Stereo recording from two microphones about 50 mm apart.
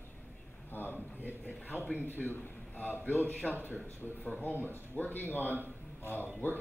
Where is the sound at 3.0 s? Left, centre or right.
Left.